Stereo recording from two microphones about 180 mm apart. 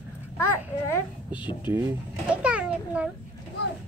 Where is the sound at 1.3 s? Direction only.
25° left (ahead or behind).